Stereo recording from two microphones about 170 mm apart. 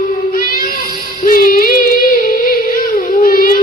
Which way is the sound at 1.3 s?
60° left (ahead or behind).